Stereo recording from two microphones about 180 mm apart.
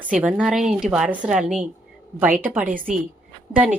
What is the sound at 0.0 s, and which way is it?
A woman's voice, 5° right (ahead or behind).